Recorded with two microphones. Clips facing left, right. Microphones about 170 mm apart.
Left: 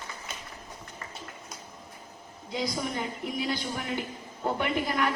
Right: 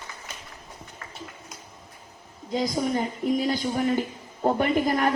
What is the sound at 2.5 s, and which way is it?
A woman's voice, 40° right (ahead or behind).